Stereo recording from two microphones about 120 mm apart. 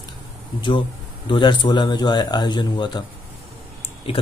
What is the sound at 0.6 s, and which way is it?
Speech, 45° left (ahead or behind).